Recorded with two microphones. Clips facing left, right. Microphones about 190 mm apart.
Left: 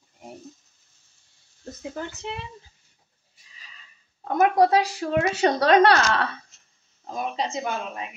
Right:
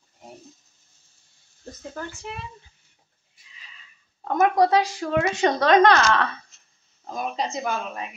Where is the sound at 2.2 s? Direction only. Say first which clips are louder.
Left 2 dB; 25° left (ahead or behind).